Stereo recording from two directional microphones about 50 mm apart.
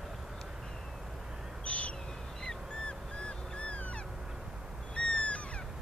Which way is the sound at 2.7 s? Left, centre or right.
Centre.